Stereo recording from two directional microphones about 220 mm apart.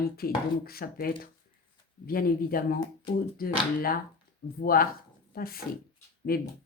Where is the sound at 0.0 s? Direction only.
45° left (ahead or behind).